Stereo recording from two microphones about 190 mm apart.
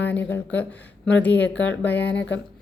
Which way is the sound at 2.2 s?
70° left (ahead or behind).